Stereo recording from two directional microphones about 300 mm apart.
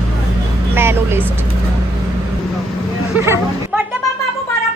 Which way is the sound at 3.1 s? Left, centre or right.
Centre.